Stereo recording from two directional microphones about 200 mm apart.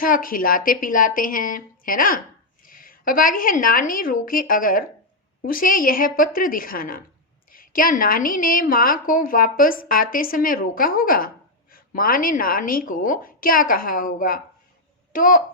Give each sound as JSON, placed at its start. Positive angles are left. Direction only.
{"t": 0.0, "sound": "a woman's voice", "side_deg": 45}